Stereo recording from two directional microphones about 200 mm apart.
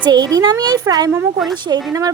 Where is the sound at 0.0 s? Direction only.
20° right (ahead or behind).